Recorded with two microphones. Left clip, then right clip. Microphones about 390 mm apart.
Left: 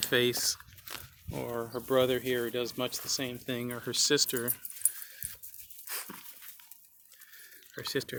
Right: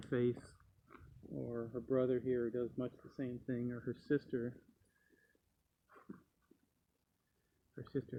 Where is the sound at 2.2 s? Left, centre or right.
Left.